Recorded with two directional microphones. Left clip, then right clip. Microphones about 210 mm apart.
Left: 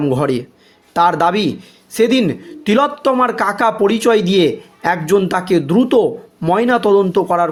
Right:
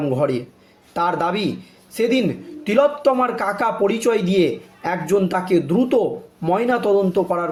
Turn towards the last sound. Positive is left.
turn(degrees=45)  # may be behind; listen again after turning